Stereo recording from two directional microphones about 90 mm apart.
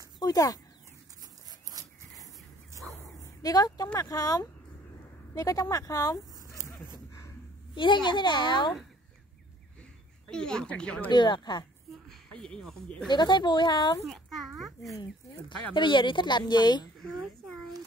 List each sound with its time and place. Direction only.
0.2 s speech: 45° left (ahead or behind)
1.8 s a sound: 45° right (ahead or behind)
2.9 s bow-wow: 35° left (ahead or behind)
4.0 s speech: 40° left (ahead or behind)
6.5 s dog: 35° left (ahead or behind)
7.7 s speech: 60° left (ahead or behind)
10.2 s speech: 10° left (ahead or behind)
11.1 s speech: 60° left (ahead or behind)
12.1 s speech: 10° left (ahead or behind)
13.1 s speech: 55° left (ahead or behind)
14.0 s a sound: centre (ahead or behind)
15.0 s speech: 60° left (ahead or behind)